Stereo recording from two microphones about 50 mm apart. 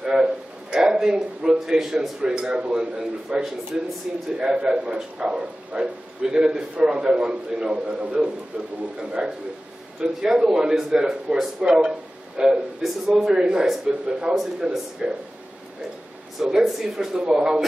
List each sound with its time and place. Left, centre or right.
0.0 s a sound: centre
2.0 s a man's voice: centre
16.3 s a man's voice: centre
17.2 s a man's voice: centre